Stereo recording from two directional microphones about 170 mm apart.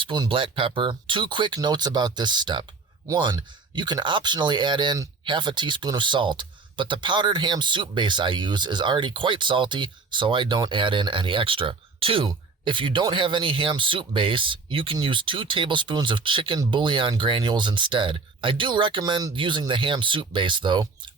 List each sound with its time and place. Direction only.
0.0 s speech: 30° right (ahead or behind)